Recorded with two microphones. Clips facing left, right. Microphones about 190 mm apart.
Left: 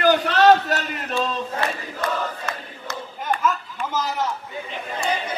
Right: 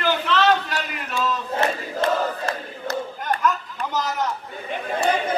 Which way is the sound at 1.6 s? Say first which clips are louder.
Right 4 dB; 30° right (ahead or behind).